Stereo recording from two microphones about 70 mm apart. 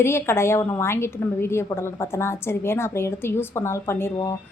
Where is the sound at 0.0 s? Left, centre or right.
Left.